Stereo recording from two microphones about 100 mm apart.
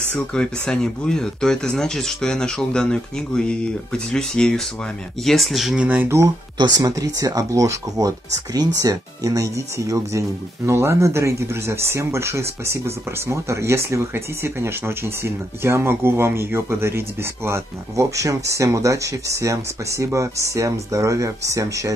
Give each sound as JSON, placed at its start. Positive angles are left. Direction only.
{"t": 0.1, "sound": "speech", "side_deg": 10}
{"t": 5.9, "sound": "speech", "side_deg": -20}
{"t": 6.6, "sound": "speech", "side_deg": -40}